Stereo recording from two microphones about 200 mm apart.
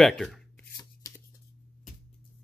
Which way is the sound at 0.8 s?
15° left (ahead or behind).